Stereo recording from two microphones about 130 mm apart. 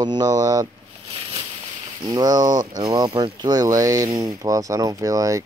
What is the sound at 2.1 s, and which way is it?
Speech, 30° right (ahead or behind).